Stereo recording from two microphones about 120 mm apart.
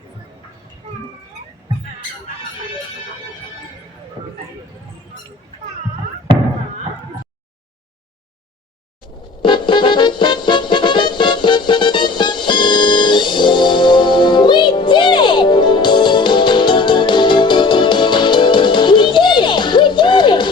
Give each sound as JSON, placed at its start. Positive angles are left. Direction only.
{"t": 9.4, "sound": "music", "side_deg": 40}